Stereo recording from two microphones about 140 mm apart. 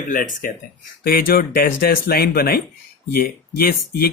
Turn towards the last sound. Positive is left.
turn(degrees=90)